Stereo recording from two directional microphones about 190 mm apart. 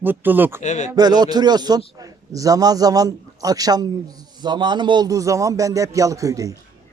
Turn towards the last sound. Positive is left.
turn(degrees=-15)  # may be behind; listen again after turning